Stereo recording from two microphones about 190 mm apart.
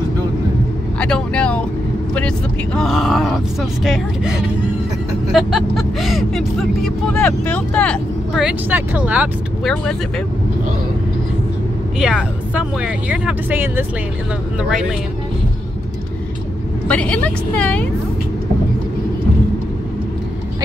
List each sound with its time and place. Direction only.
0.9 s speech: 5° left (ahead or behind)
12.0 s speech: 5° right (ahead or behind)
16.8 s a woman's voice: 5° left (ahead or behind)